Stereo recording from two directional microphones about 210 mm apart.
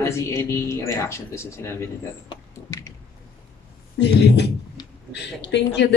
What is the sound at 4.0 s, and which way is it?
Speech, 55° left (ahead or behind).